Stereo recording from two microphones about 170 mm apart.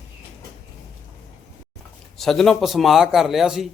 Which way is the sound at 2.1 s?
Centre (ahead or behind).